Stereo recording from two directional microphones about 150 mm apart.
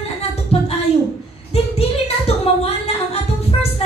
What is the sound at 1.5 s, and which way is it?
Child singing, 40° left (ahead or behind).